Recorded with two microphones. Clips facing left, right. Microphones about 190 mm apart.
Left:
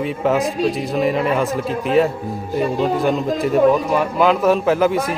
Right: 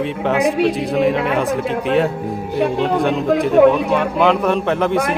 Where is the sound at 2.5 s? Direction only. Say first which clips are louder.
Right 1 dB; 70° right (ahead or behind).